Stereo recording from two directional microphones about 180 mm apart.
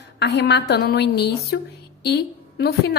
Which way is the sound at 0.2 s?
70° left (ahead or behind).